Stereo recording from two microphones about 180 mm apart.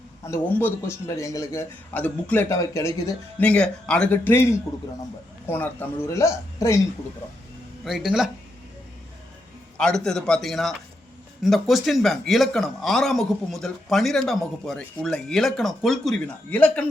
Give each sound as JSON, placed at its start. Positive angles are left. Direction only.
{"t": 0.3, "sound": "a man's voice", "side_deg": 10}
{"t": 5.5, "sound": "a man's voice", "side_deg": 10}
{"t": 7.9, "sound": "a man's voice", "side_deg": -5}
{"t": 9.7, "sound": "a man's voice", "side_deg": 5}